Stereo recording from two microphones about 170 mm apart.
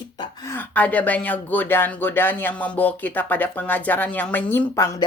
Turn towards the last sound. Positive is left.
turn(degrees=20)  # may be behind; listen again after turning